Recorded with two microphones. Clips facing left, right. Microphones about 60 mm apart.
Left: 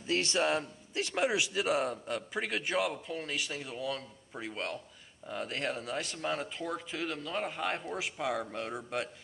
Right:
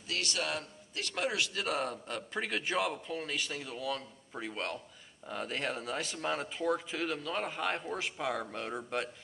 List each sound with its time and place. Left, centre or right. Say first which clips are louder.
0.0 s a man's voice: left 6 dB; left; by 9.1 s centre